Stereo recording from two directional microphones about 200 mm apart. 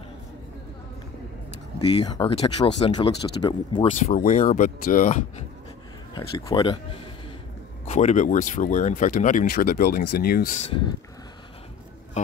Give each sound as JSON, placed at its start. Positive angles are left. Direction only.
{"t": 1.8, "sound": "speech", "side_deg": 25}
{"t": 4.0, "sound": "speech", "side_deg": 40}
{"t": 6.1, "sound": "speech", "side_deg": 25}
{"t": 7.8, "sound": "speech", "side_deg": 35}